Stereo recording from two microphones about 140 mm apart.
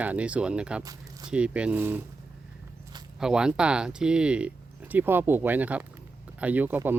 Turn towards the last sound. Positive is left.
turn(degrees=-15)  # may be behind; listen again after turning